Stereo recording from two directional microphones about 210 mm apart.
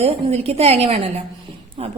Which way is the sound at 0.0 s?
30° right (ahead or behind).